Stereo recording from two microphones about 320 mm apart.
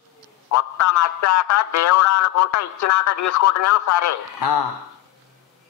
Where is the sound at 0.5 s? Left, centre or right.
Left.